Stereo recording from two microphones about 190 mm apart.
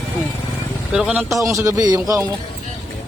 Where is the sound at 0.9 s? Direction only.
5° right (ahead or behind).